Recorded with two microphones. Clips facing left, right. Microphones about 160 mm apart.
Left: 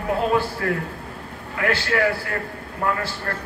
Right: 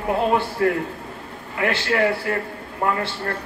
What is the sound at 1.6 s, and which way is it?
Speech, 25° right (ahead or behind).